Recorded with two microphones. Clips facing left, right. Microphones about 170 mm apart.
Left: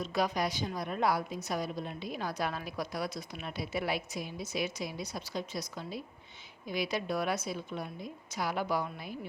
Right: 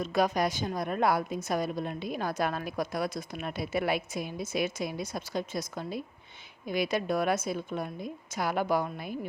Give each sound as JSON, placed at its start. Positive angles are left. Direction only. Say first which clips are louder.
{"t": 0.0, "sound": "a woman's voice", "louder": "right 4 dB", "side_deg": -50}